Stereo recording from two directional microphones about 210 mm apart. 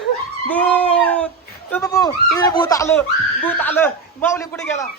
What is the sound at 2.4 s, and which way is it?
Speech, 20° left (ahead or behind).